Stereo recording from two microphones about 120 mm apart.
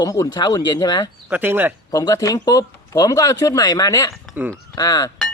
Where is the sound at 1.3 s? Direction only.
15° right (ahead or behind).